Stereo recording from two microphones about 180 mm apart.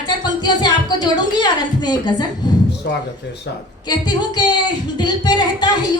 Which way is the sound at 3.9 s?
25° left (ahead or behind).